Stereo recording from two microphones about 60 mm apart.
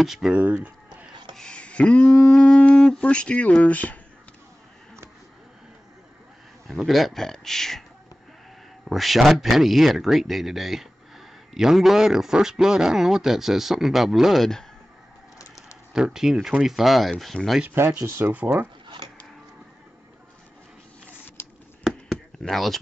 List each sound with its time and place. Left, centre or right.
0.0 s speech: centre
0.4 s speech: right
1.3 s speech: centre
6.7 s speech: centre
8.8 s speech: centre
15.5 s a sound: centre
16.6 s speech: centre
17.6 s speech: right
21.4 s a sound: left
22.1 s a sound: centre